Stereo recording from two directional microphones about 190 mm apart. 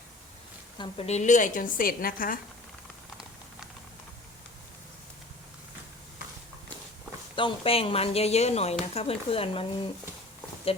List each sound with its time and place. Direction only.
0.8 s a woman's voice: 35° left (ahead or behind)
7.3 s speech: 25° left (ahead or behind)